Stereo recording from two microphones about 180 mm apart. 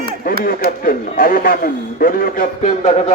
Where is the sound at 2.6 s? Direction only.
40° left (ahead or behind).